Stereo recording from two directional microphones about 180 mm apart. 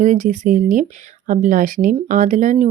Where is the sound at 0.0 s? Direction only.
45° right (ahead or behind).